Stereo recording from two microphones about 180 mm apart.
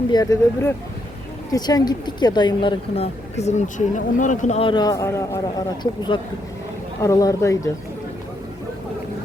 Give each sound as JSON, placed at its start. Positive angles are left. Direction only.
{"t": 0.1, "sound": "speech", "side_deg": 20}
{"t": 4.7, "sound": "speech", "side_deg": 20}